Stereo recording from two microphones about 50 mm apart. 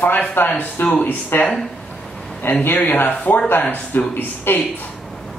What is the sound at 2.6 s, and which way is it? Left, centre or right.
A man's voice, left.